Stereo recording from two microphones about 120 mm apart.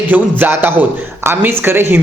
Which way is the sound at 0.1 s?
15° right (ahead or behind).